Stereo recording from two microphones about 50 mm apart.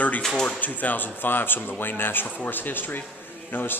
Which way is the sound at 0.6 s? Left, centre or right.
Left.